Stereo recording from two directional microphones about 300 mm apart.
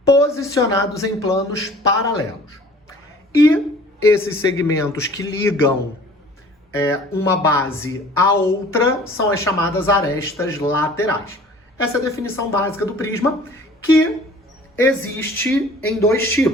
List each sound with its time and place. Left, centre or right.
0.1 s a woman's voice: centre
4.6 s a woman's voice: centre
6.7 s a woman's voice: centre
14.8 s a woman's voice: centre